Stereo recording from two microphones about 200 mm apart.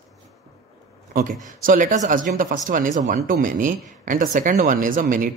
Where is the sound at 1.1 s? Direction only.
45° right (ahead or behind).